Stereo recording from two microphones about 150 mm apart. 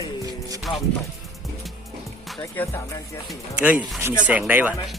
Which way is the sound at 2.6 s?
15° left (ahead or behind).